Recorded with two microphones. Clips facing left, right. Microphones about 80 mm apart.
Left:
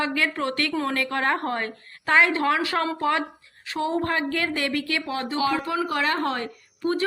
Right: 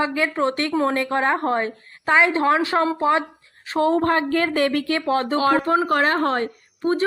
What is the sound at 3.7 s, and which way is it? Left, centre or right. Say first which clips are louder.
A woman's voice: right 6 dB; right.